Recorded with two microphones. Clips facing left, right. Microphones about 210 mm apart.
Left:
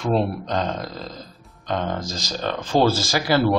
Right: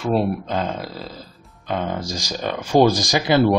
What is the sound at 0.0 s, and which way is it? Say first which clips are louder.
Speech: right 1 dB; 5° right (ahead or behind).